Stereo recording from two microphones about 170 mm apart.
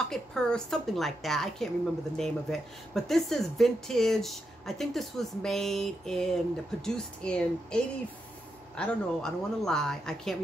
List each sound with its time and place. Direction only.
0.1 s speech: 5° left (ahead or behind)